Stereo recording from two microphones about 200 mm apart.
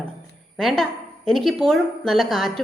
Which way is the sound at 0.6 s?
Centre (ahead or behind).